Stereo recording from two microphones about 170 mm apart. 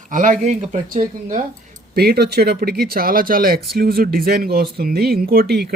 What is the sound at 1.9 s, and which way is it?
Speech, 65° right (ahead or behind).